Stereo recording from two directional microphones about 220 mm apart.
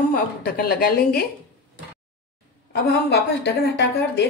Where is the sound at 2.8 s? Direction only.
50° left (ahead or behind).